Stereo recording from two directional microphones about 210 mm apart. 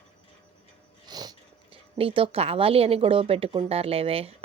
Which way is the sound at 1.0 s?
20° right (ahead or behind).